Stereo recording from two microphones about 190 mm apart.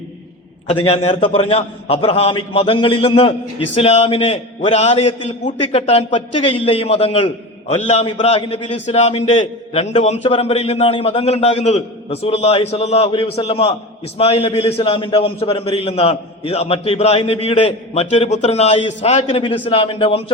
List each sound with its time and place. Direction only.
0.7 s a man's voice: 30° left (ahead or behind)